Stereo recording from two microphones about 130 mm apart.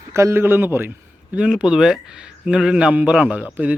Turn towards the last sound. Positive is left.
turn(degrees=-5)  # may be behind; listen again after turning